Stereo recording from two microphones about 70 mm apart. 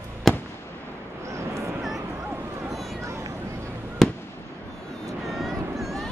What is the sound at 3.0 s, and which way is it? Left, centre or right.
Vehicle, right.